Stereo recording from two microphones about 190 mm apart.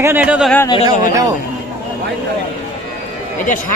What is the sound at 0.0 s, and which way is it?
Speech, 10° right (ahead or behind).